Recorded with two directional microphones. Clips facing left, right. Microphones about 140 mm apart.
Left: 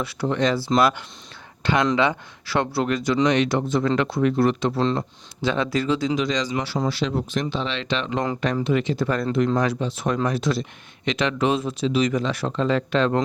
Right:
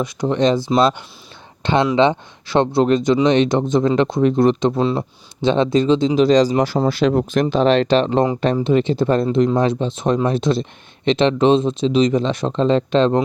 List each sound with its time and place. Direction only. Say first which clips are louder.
0.0 s speech: right 5 dB; 20° right (ahead or behind)